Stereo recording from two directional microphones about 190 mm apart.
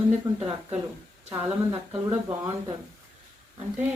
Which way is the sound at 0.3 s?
30° right (ahead or behind).